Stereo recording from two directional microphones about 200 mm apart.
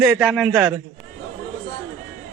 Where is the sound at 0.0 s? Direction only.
5° right (ahead or behind).